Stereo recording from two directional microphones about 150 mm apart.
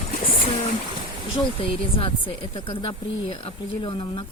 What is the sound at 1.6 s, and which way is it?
Speech, 35° left (ahead or behind).